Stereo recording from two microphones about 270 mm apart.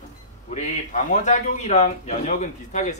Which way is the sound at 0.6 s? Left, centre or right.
Left.